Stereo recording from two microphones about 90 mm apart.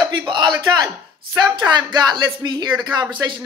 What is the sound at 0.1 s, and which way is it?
Speech, 60° right (ahead or behind).